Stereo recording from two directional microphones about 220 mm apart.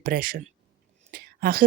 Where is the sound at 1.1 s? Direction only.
40° right (ahead or behind).